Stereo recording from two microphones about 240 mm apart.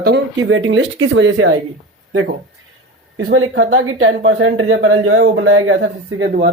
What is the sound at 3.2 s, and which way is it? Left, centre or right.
Speech, right.